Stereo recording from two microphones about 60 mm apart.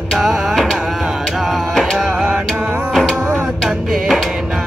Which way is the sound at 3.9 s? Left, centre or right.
Centre.